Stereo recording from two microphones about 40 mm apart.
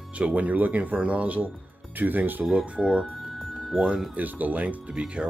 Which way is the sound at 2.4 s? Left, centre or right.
Right.